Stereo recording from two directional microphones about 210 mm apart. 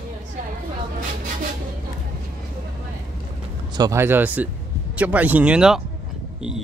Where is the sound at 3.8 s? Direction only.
15° right (ahead or behind).